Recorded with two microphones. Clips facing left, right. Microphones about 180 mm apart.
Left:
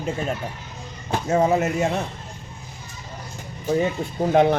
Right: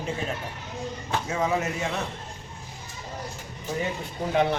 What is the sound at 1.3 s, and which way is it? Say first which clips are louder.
Speech: left 8 dB; 45° left (ahead or behind).